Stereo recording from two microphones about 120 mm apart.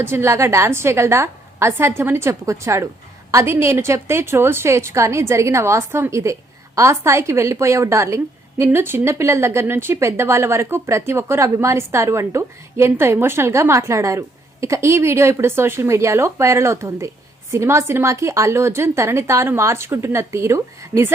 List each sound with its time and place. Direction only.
0.0 s a woman's voice: 20° right (ahead or behind)